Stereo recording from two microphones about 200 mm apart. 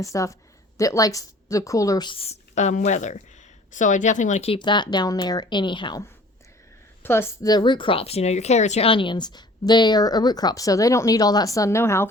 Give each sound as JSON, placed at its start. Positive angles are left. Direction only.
{"t": 0.0, "sound": "speech", "side_deg": 15}